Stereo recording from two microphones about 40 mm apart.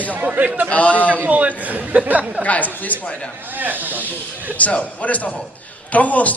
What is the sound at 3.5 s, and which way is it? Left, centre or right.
Speech, right.